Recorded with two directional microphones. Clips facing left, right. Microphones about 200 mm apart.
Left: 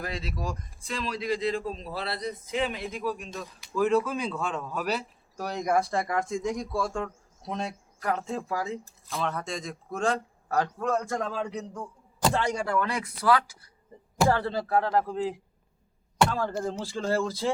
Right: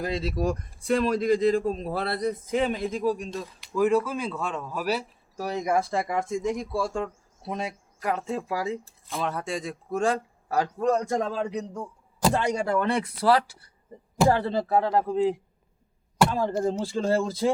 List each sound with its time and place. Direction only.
0.2 s speech: 55° right (ahead or behind)
3.8 s speech: 10° right (ahead or behind); by 13.6 s 30° right (ahead or behind)
14.3 s speech: 20° right (ahead or behind)